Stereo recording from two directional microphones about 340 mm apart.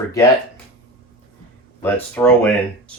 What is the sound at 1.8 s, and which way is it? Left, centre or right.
Speech, centre.